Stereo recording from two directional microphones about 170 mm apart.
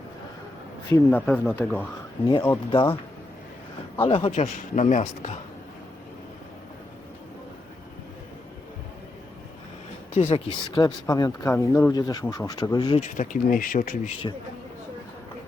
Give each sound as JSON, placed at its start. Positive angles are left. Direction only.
{"t": 0.9, "sound": "speech", "side_deg": 15}
{"t": 1.2, "sound": "speech", "side_deg": 5}
{"t": 4.0, "sound": "speech", "side_deg": 35}
{"t": 10.2, "sound": "speech", "side_deg": 35}
{"t": 13.0, "sound": "speech", "side_deg": 50}